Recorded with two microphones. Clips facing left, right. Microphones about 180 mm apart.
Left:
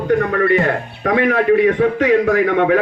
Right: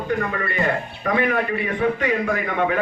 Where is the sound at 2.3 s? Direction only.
75° left (ahead or behind).